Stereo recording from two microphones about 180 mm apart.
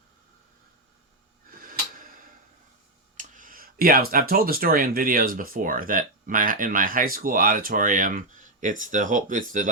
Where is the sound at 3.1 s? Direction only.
50° right (ahead or behind).